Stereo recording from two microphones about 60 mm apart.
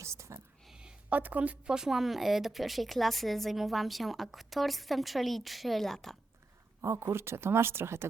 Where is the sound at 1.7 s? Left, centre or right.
Centre.